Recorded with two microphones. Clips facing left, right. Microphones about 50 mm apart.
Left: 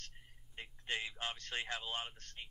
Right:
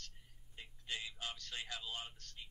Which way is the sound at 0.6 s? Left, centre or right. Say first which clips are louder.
Left 5 dB; left.